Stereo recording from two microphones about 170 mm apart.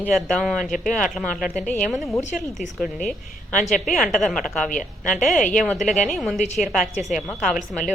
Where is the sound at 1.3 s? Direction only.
50° left (ahead or behind).